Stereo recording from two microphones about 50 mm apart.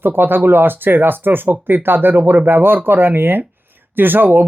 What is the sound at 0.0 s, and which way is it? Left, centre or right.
Speech, right.